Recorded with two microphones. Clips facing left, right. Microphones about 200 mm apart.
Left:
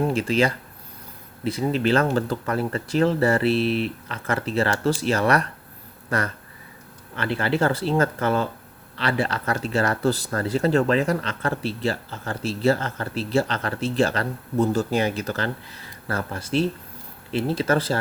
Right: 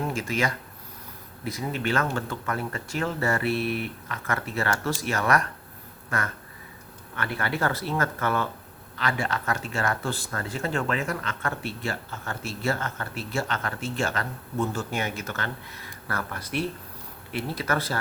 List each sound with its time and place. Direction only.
0.1 s speech: 30° left (ahead or behind)